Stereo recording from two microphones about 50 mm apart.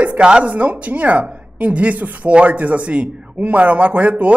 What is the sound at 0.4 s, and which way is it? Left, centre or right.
A woman's voice, right.